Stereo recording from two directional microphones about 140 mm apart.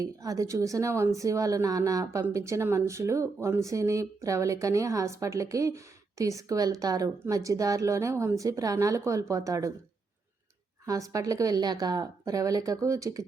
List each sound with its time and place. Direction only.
0.0 s speech: 25° right (ahead or behind)
10.8 s speech: 25° right (ahead or behind)